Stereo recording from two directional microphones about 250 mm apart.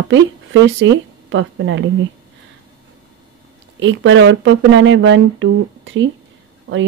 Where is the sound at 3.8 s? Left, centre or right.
Right.